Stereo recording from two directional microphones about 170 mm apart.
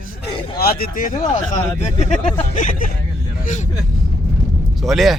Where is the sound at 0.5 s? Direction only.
60° left (ahead or behind).